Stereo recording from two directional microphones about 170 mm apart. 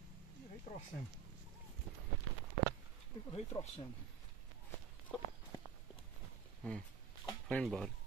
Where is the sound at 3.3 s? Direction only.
35° left (ahead or behind).